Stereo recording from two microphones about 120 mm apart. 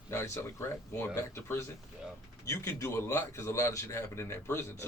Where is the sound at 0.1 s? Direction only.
20° left (ahead or behind).